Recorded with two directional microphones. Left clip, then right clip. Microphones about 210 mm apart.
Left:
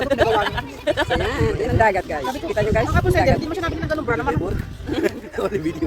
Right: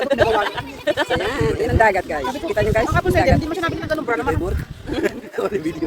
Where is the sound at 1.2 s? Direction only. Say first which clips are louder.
Right 1 dB; 10° right (ahead or behind).